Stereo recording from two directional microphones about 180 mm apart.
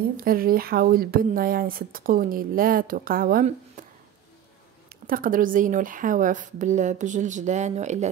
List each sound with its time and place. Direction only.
0.2 s speech: 55° right (ahead or behind)
3.8 s a sound: 45° right (ahead or behind)
5.0 s speech: 50° right (ahead or behind)